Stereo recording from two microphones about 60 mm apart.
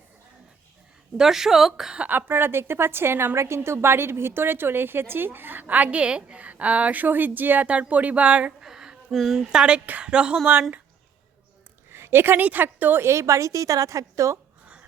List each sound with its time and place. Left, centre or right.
1.1 s a woman's voice: centre
2.0 s a woman's voice: right
8.6 s a sound: centre
9.1 s a woman's voice: centre
9.5 s a woman's voice: centre
11.9 s a woman's voice: right
13.1 s a woman's voice: right